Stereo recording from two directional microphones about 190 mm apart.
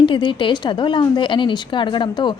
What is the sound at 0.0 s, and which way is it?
A woman's voice, 25° left (ahead or behind).